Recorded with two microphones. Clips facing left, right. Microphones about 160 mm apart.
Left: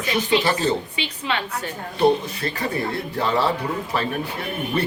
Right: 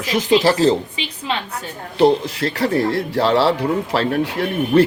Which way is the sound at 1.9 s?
90° right.